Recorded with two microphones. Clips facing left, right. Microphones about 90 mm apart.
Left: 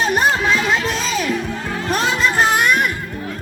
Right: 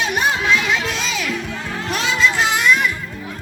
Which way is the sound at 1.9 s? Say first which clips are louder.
Left 1 dB; 45° left (ahead or behind).